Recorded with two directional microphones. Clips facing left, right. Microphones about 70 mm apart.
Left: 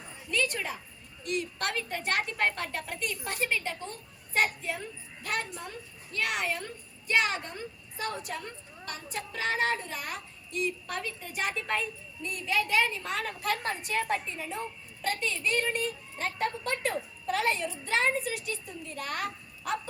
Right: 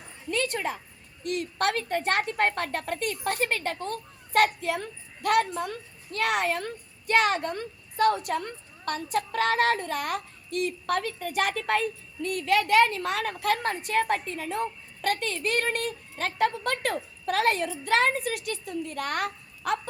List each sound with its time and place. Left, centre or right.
0.3 s a sound: right
1.2 s a woman's voice: right
17.7 s a child's voice: right